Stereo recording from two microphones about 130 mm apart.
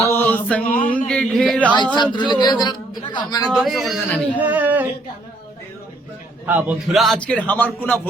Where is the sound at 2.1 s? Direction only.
35° left (ahead or behind).